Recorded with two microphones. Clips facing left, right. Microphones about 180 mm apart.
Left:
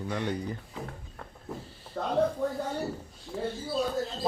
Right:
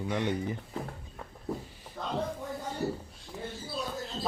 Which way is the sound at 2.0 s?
70° left (ahead or behind).